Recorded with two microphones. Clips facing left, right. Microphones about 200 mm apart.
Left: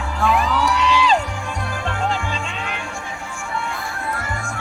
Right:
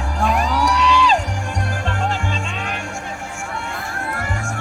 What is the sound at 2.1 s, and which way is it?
Music, 45° right (ahead or behind).